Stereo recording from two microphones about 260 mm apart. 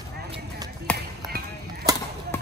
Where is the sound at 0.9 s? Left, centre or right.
Centre.